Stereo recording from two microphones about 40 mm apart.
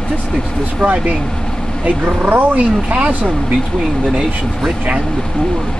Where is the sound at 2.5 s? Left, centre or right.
Right.